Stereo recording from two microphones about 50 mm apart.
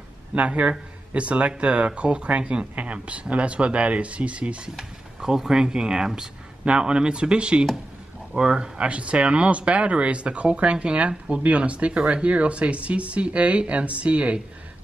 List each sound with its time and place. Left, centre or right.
0.3 s a man's voice: right
4.7 s speech: centre; by 14.4 s right